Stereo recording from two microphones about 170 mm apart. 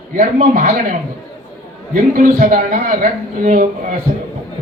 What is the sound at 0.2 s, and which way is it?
Speech, 50° right (ahead or behind).